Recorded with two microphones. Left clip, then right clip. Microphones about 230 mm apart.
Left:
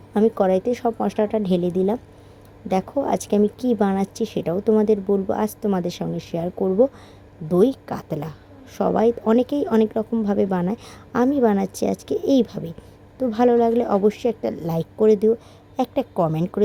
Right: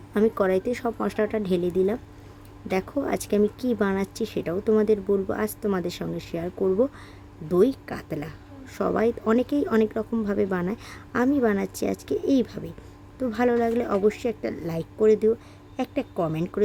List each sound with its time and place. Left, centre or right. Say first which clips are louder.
0.1 s a woman's voice: left 4 dB; centre
3.1 s a woman's voice: left 3 dB; centre